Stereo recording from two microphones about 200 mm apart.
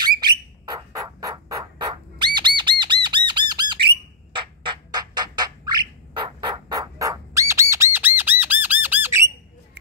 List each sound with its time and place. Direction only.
0.0 s bird: 20° right (ahead or behind)
4.3 s squawk: 25° right (ahead or behind)